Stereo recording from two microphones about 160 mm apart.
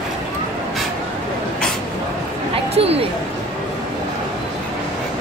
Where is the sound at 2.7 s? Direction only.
40° right (ahead or behind).